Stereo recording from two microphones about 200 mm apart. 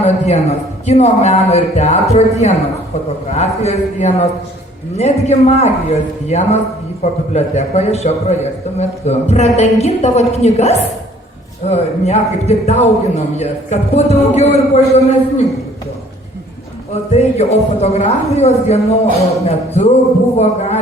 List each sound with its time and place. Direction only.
0.0 s a man's voice: 30° left (ahead or behind)
16.9 s a man's voice: 30° left (ahead or behind)